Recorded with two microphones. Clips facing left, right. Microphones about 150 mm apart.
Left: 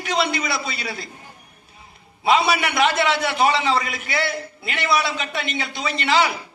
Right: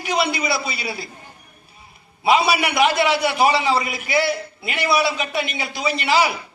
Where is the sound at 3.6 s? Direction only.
20° right (ahead or behind).